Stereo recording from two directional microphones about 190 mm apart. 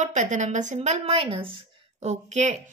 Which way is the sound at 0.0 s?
40° right (ahead or behind).